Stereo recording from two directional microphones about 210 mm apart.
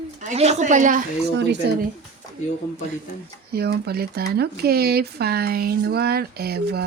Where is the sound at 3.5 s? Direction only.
50° right (ahead or behind).